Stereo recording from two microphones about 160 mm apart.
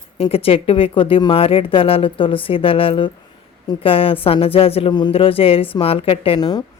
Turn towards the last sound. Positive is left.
turn(degrees=25)  # may be behind; listen again after turning